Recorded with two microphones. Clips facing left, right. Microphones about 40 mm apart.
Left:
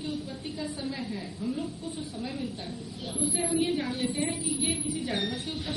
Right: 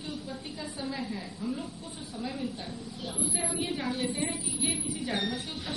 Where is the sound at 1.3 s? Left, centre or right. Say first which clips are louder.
Left 3 dB; right.